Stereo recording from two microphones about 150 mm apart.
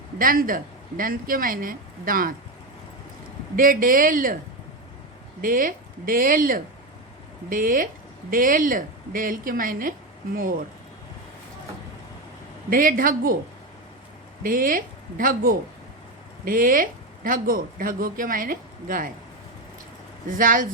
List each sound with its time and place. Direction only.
0.2 s speech: 65° right (ahead or behind)
3.5 s speech: 70° right (ahead or behind)
5.4 s speech: 65° right (ahead or behind)
12.7 s speech: 70° right (ahead or behind)
14.4 s speech: 65° right (ahead or behind)
20.3 s speech: 65° right (ahead or behind)